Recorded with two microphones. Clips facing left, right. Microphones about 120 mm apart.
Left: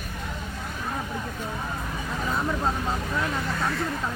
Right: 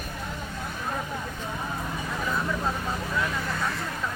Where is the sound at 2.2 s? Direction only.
25° left (ahead or behind).